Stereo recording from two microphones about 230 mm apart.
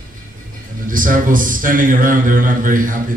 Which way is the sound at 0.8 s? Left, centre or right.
Right.